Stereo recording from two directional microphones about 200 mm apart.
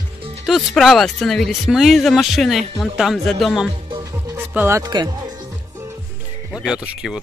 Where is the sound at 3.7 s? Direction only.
25° right (ahead or behind).